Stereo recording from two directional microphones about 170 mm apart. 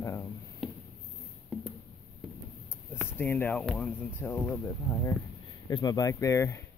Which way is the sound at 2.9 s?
10° left (ahead or behind).